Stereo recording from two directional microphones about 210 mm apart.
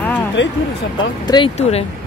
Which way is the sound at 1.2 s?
25° left (ahead or behind).